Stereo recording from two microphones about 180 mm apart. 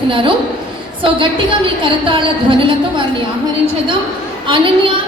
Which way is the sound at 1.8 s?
30° right (ahead or behind).